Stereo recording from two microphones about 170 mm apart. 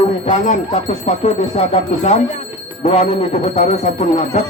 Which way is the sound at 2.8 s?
40° left (ahead or behind).